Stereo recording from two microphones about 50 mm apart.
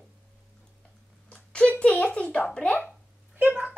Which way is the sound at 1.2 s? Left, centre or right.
Left.